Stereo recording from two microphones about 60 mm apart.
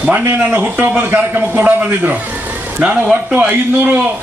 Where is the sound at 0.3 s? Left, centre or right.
Right.